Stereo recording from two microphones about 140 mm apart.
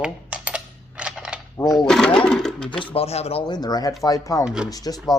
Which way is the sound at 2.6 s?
35° left (ahead or behind).